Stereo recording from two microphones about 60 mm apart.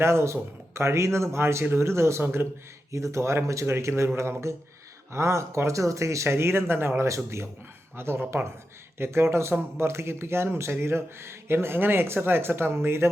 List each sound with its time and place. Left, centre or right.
0.0 s a man's voice: right
2.9 s a man's voice: right